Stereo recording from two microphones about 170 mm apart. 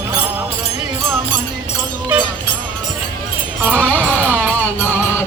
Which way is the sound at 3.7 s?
10° left (ahead or behind).